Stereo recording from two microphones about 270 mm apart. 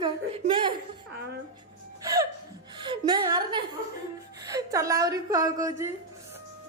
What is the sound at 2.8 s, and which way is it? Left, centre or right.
A woman's voice, centre.